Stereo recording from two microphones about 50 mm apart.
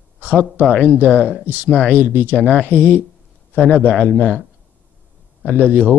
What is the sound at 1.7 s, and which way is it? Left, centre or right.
Speech, left.